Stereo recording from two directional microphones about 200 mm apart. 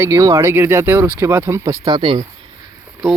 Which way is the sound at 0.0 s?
15° right (ahead or behind).